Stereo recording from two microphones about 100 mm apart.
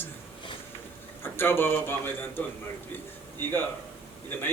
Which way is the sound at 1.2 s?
20° left (ahead or behind).